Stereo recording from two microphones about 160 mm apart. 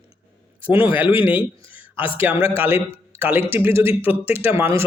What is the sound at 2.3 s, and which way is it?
Speech, 10° right (ahead or behind).